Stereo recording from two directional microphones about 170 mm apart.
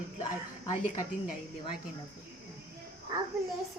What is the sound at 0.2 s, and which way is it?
Speech, 25° left (ahead or behind).